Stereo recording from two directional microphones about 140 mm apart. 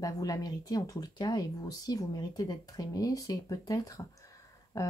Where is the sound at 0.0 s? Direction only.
25° left (ahead or behind).